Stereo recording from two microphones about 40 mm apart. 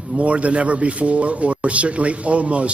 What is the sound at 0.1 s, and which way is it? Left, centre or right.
Speech, right.